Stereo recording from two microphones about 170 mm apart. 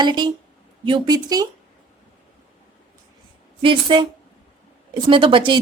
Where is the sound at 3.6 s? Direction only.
30° right (ahead or behind).